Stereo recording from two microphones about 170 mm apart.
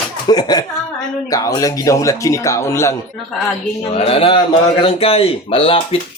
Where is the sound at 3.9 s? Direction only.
35° left (ahead or behind).